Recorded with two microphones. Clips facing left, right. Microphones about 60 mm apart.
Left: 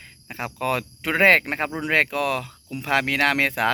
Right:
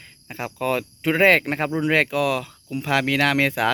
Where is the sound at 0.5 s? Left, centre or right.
Left.